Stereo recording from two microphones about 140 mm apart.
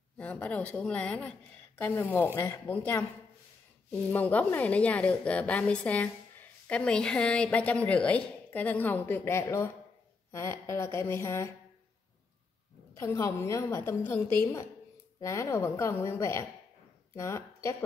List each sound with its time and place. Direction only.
0.2 s a woman's voice: 10° left (ahead or behind)
4.1 s a woman's voice: 10° left (ahead or behind)
13.0 s a woman's voice: 20° left (ahead or behind)